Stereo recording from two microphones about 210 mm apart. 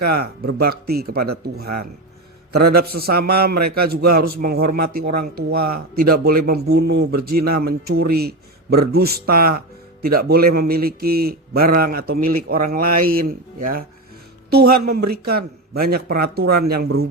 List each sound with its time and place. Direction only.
0.2 s a man's voice: 45° right (ahead or behind)